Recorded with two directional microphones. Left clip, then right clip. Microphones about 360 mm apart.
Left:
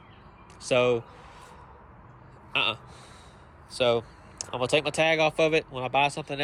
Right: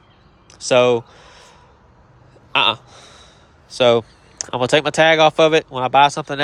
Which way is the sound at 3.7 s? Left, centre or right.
Centre.